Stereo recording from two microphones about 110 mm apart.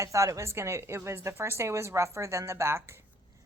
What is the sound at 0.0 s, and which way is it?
A woman's voice, 30° right (ahead or behind).